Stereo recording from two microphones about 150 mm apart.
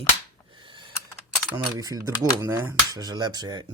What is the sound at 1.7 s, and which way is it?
Speech, 25° right (ahead or behind).